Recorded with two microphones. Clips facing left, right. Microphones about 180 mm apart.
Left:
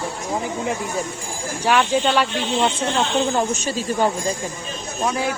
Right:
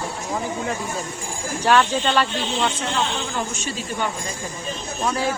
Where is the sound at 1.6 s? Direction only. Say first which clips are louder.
Even; 10° left (ahead or behind).